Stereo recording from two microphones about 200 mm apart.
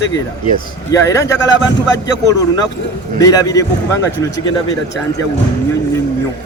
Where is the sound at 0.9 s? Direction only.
15° left (ahead or behind).